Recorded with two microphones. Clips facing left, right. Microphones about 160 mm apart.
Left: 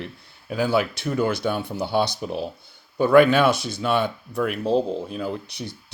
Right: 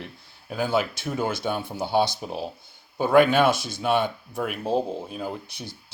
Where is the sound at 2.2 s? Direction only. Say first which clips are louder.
Left 3 dB; 55° left (ahead or behind).